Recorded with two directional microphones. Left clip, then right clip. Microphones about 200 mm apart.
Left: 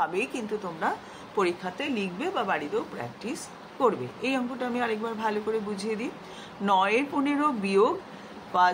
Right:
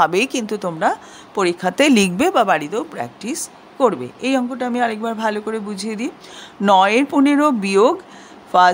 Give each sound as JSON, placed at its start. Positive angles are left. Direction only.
{"t": 0.0, "sound": "a woman's voice", "side_deg": -50}